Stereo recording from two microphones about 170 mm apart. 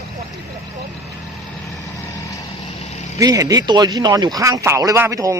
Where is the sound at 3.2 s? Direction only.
20° right (ahead or behind).